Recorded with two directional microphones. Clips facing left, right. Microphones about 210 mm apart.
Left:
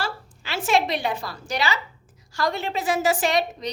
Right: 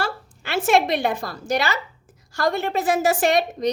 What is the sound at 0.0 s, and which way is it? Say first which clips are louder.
A woman's voice: right 3 dB; 55° right (ahead or behind).